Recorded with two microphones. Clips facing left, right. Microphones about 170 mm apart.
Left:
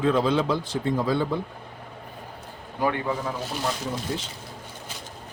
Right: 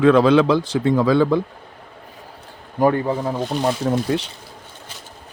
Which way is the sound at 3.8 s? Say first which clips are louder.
Right 10 dB; 60° right (ahead or behind).